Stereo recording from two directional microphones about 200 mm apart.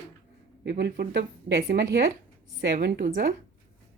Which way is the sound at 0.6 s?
60° right (ahead or behind).